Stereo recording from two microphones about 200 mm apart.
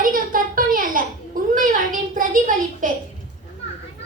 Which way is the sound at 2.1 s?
40° right (ahead or behind).